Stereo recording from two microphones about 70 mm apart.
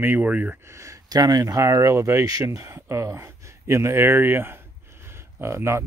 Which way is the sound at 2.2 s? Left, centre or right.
Right.